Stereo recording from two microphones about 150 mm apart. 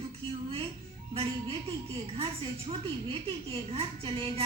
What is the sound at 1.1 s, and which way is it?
Speech, 40° right (ahead or behind).